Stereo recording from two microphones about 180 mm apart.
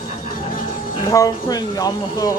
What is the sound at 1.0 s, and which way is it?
Speech, 20° left (ahead or behind).